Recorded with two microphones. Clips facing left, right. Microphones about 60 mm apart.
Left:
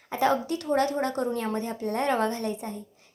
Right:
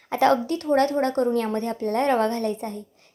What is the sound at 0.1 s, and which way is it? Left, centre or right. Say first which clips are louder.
Speech: right 5 dB; right.